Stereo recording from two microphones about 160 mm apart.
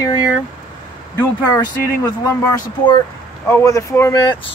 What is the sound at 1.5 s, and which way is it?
Speech, 20° left (ahead or behind).